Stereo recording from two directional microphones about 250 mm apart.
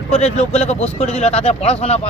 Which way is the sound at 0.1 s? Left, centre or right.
Left.